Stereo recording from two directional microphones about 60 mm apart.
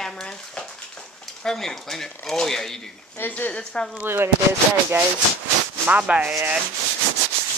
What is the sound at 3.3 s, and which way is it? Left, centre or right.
Speech, left.